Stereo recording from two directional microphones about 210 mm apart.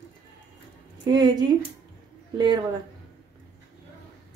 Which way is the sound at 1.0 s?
20° right (ahead or behind).